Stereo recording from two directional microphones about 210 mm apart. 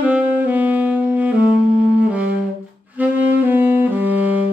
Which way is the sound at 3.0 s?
10° right (ahead or behind).